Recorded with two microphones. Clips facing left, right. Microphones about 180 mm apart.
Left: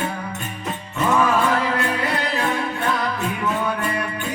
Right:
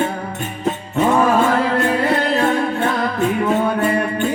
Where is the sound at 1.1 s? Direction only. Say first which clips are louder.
Right 3 dB; 40° right (ahead or behind).